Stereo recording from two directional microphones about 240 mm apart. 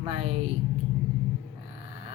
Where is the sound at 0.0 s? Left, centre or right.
Right.